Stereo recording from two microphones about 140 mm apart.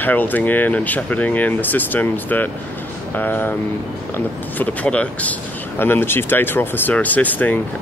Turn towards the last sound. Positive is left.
turn(degrees=10)  # may be behind; listen again after turning